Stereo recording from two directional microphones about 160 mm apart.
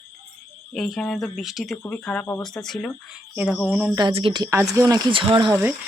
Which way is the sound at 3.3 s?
5° right (ahead or behind).